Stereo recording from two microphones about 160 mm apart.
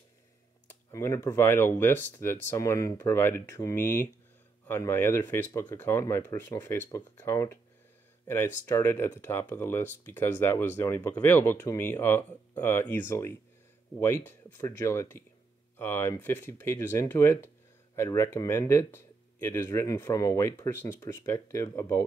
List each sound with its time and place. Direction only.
0.7 s speech: 20° left (ahead or behind)